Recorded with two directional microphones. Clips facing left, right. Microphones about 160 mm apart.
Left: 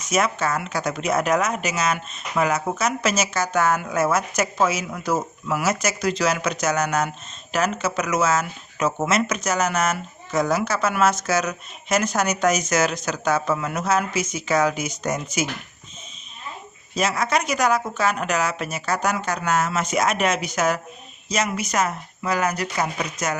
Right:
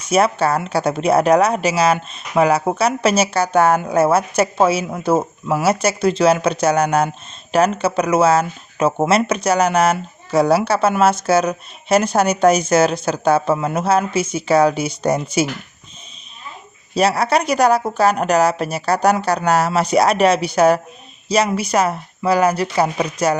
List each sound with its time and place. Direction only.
0.0 s speech: 30° right (ahead or behind)
16.9 s speech: 35° right (ahead or behind)